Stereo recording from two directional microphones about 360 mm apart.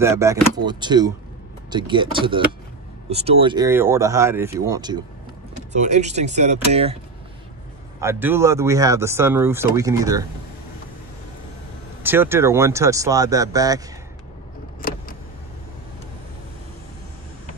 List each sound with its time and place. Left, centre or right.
0.0 s speech: centre
8.0 s speech: centre
12.0 s speech: centre
14.8 s vehicle: left